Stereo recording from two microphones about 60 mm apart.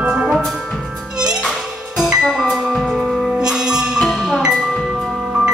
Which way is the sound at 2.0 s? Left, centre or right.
Centre.